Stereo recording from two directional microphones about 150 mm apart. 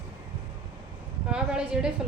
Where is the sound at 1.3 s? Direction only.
5° right (ahead or behind).